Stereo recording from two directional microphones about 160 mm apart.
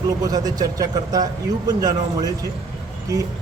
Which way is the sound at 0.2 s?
25° right (ahead or behind).